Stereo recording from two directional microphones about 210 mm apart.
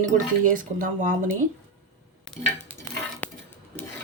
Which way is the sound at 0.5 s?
40° right (ahead or behind).